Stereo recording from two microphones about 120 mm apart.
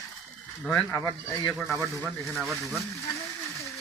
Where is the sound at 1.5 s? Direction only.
Centre (ahead or behind).